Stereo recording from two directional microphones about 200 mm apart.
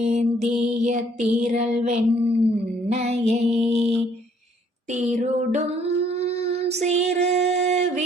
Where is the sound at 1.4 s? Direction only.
35° right (ahead or behind).